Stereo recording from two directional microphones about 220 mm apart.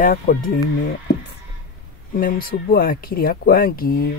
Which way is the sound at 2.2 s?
40° left (ahead or behind).